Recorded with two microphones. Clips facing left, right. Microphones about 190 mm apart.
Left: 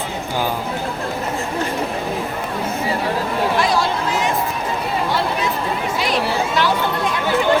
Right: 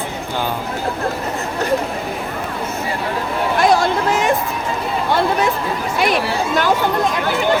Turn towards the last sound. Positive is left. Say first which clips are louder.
# right 3 dB
turn(degrees=-45)  # may be behind; listen again after turning